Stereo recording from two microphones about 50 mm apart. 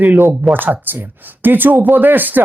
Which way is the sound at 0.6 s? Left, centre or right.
Right.